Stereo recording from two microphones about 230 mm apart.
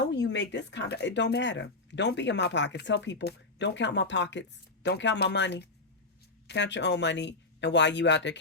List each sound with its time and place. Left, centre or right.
0.0 s speech: left